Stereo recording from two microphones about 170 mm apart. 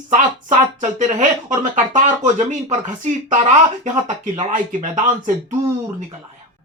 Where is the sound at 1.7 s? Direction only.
45° right (ahead or behind).